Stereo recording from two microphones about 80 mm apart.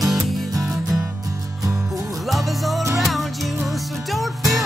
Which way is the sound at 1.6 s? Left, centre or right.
Right.